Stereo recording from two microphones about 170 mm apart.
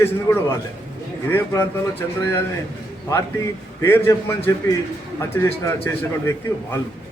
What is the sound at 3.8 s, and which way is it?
A man's voice, 15° left (ahead or behind).